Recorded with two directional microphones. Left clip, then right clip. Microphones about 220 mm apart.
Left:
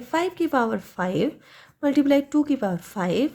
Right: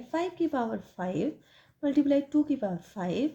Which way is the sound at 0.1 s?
30° left (ahead or behind).